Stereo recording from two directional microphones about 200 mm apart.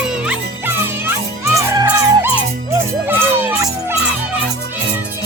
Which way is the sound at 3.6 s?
15° right (ahead or behind).